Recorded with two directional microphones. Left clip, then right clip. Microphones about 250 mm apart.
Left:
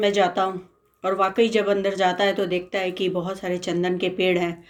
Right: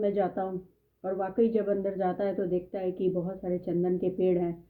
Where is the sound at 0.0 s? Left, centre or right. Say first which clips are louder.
Left 9 dB; centre.